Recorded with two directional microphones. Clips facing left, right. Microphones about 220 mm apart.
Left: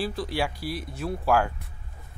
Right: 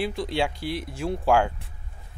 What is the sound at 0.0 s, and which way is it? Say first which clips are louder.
Speech: right 2 dB; 20° right (ahead or behind).